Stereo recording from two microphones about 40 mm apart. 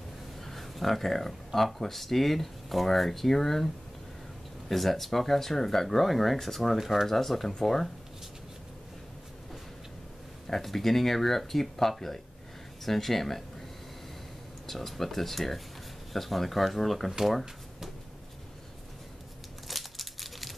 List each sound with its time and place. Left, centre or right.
0.4 s speech: centre
6.8 s speech: centre
7.1 s speech: centre
10.4 s speech: centre
14.7 s speech: centre
17.2 s a sound: centre
19.7 s a sound: centre